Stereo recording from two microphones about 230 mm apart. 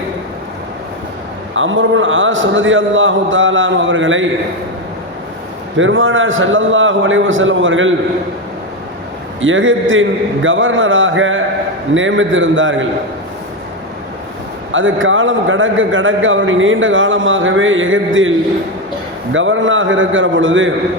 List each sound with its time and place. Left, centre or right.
1.5 s a man's voice: right
5.7 s a man's voice: right
9.4 s a man's voice: right
14.7 s a man's voice: right